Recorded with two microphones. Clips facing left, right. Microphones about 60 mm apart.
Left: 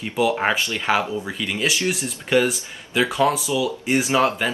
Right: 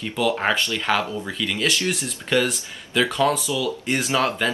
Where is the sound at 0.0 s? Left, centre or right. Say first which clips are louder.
Left 2 dB; centre.